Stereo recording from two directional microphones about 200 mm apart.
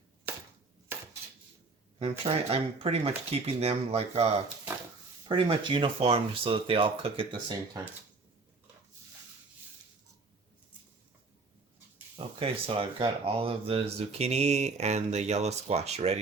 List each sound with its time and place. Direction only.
0.9 s a sound: 10° right (ahead or behind)
2.0 s speech: 30° right (ahead or behind)
5.3 s speech: 25° right (ahead or behind)
12.4 s speech: 30° right (ahead or behind)